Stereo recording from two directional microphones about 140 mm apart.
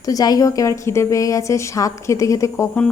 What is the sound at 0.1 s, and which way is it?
A woman's voice, 25° left (ahead or behind).